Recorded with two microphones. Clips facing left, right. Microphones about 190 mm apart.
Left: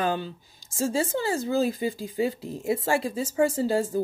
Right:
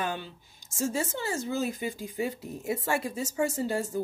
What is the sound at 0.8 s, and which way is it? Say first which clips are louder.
Speech: left 5 dB; 30° left (ahead or behind).